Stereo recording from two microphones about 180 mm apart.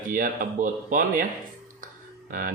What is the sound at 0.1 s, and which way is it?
Speech, 50° right (ahead or behind).